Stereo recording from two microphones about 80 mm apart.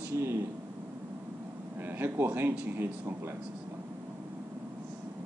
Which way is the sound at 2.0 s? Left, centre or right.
Right.